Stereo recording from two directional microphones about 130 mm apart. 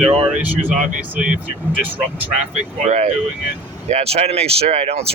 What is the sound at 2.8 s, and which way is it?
Speech, 65° right (ahead or behind).